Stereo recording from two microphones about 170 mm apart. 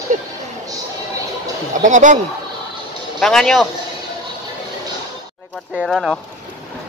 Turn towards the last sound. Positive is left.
turn(degrees=0)  # may be behind; listen again after turning